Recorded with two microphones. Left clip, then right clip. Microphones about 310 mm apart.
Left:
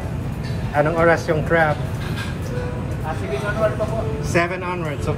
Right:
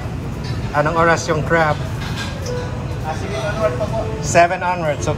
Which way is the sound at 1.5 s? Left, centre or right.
Right.